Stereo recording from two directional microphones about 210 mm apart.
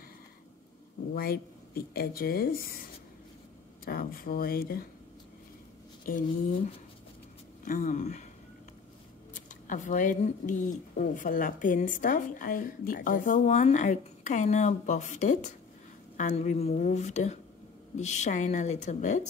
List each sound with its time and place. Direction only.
1.1 s speech: 45° left (ahead or behind)
3.8 s speech: 45° left (ahead or behind)
6.0 s speech: 45° left (ahead or behind)
7.6 s speech: 40° left (ahead or behind)
9.7 s speech: 35° left (ahead or behind)